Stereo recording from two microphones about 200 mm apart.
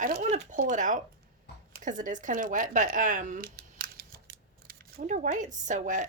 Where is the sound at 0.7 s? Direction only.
40° right (ahead or behind).